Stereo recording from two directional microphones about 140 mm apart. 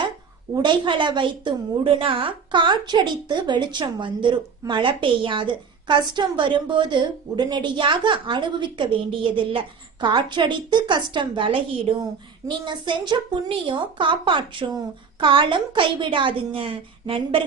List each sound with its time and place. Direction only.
0.5 s a woman's voice: 35° right (ahead or behind)